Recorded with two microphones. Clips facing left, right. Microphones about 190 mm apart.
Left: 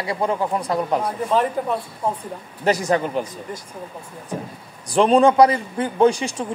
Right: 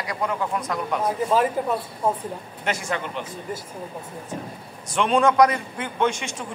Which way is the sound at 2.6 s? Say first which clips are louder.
Left 9 dB; 35° left (ahead or behind).